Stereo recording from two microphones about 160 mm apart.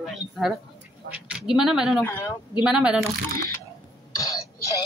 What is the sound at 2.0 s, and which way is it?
Speech, 20° left (ahead or behind).